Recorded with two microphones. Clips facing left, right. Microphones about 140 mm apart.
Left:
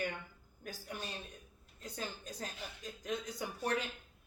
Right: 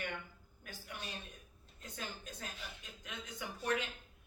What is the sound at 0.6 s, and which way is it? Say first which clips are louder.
Speech: left 4 dB; 40° left (ahead or behind).